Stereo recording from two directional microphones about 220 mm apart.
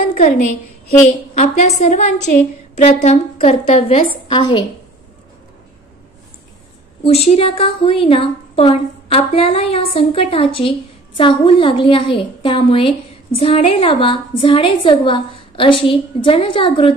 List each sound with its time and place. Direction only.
0.0 s a sound: 35° left (ahead or behind)
1.0 s a woman's voice: 30° left (ahead or behind)
7.1 s a woman's voice: 25° left (ahead or behind)